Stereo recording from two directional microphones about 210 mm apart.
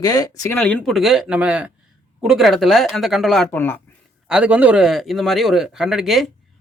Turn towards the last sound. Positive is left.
turn(degrees=0)  # may be behind; listen again after turning